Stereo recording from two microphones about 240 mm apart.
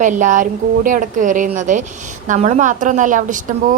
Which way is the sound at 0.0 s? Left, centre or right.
Right.